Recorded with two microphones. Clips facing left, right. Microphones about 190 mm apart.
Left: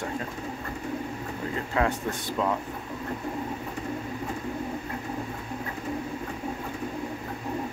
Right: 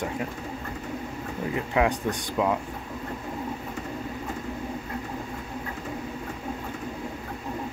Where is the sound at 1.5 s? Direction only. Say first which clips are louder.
Right 3 dB; 15° right (ahead or behind).